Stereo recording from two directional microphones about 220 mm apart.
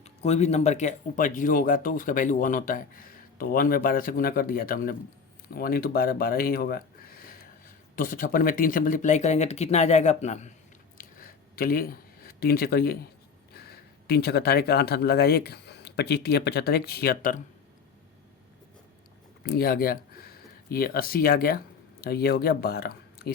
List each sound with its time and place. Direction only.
0.0 s speech: 30° left (ahead or behind)
10.9 s a sound: 40° left (ahead or behind)
13.5 s speech: 45° left (ahead or behind)
19.4 s speech: 45° left (ahead or behind)